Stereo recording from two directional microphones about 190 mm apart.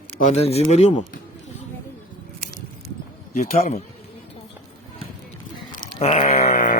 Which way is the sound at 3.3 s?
35° left (ahead or behind).